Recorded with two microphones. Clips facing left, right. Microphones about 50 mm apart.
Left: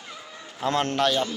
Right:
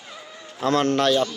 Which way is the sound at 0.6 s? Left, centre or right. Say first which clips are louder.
Right 4 dB; left.